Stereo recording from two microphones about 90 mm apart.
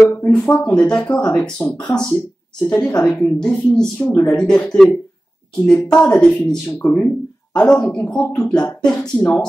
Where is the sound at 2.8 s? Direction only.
40° left (ahead or behind).